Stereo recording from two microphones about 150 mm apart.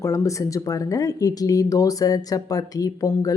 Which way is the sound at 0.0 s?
20° left (ahead or behind).